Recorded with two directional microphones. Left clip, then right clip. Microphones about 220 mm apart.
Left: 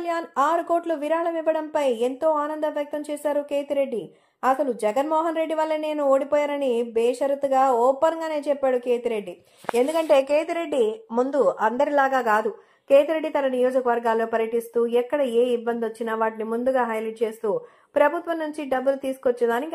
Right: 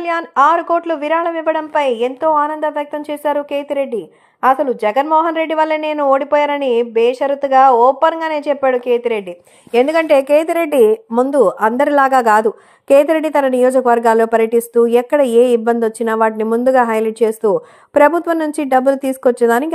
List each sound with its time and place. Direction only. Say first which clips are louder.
0.0 s a woman's voice: right 10 dB; 5° right (ahead or behind)
9.8 s a woman's voice: right 8 dB; 30° right (ahead or behind)
10.1 s a woman's voice: right 8 dB; 45° right (ahead or behind)